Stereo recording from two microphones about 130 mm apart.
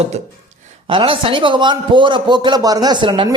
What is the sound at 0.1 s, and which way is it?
Speech, 55° right (ahead or behind).